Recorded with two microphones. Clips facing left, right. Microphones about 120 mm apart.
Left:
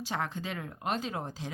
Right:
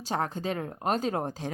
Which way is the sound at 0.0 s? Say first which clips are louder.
Right 4 dB; 40° right (ahead or behind).